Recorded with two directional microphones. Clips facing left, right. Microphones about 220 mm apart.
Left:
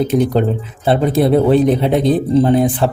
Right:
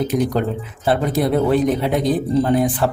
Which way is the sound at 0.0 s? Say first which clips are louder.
Left 5 dB; 25° left (ahead or behind).